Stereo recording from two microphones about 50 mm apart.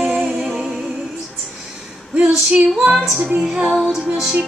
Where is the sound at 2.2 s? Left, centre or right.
Right.